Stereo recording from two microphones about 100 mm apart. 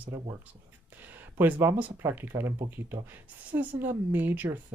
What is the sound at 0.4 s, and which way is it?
Speech, 20° right (ahead or behind).